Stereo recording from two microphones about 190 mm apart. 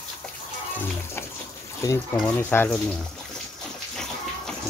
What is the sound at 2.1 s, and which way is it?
Speech, 10° left (ahead or behind).